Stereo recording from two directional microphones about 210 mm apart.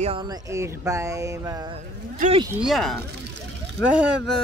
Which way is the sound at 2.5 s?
Centre (ahead or behind).